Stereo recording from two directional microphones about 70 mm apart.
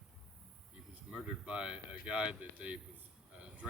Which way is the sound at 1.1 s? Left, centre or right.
Centre.